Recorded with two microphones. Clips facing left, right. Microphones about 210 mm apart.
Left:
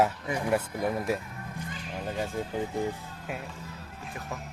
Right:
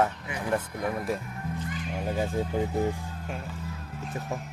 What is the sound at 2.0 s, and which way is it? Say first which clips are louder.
Speech: right 3 dB; 10° right (ahead or behind).